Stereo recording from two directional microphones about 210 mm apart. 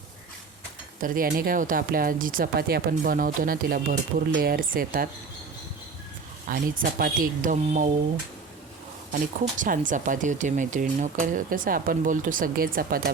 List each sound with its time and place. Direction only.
1.0 s speech: 40° right (ahead or behind)
6.5 s speech: 40° right (ahead or behind)
9.6 s speech: 40° right (ahead or behind)